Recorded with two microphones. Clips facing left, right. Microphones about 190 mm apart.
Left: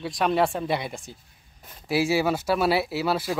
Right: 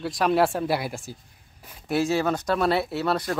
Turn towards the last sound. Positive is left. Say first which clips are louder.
# even
turn(degrees=5)  # may be behind; listen again after turning